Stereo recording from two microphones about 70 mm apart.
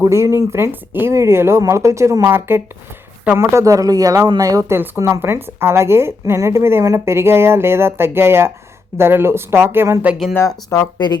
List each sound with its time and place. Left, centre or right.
0.0 s speech: right
3.3 s speech: right
4.7 s speech: right
10.4 s speech: left
10.9 s speech: left